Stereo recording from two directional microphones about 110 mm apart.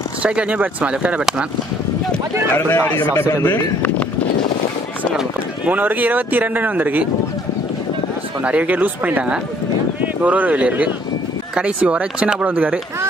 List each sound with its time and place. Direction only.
0.2 s speech: 10° right (ahead or behind)
2.5 s speech: 20° left (ahead or behind)
5.7 s speech: 15° right (ahead or behind)
8.5 s speech: 15° right (ahead or behind)